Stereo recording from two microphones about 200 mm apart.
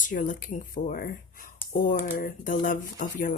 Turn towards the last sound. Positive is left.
turn(degrees=40)  # may be behind; listen again after turning